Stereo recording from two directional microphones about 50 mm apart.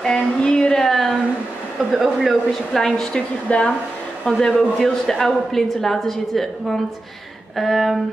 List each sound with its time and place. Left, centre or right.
0.0 s a sound: centre
0.8 s a sound: centre
1.9 s a woman's voice: centre
2.8 s a woman's voice: centre
3.4 s speech: left
4.7 s a woman's voice: centre